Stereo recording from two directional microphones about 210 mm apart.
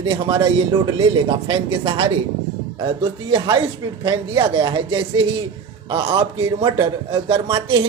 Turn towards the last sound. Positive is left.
turn(degrees=-25)  # may be behind; listen again after turning